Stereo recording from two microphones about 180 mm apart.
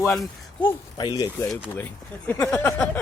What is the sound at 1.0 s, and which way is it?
Speech, 20° left (ahead or behind).